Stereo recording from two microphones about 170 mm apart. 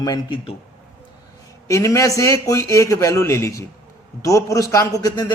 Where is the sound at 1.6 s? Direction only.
20° left (ahead or behind).